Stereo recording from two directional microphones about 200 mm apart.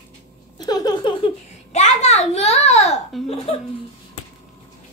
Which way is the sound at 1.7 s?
35° left (ahead or behind).